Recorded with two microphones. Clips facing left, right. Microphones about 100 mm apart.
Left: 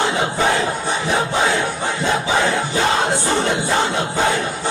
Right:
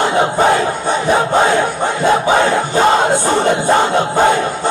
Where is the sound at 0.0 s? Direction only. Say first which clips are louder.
Right 6 dB; 50° right (ahead or behind).